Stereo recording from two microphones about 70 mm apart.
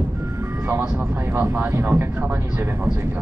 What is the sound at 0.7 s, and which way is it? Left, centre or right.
Speech, right.